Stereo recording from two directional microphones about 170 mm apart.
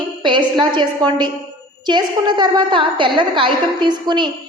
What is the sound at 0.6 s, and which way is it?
A woman's voice, 25° right (ahead or behind).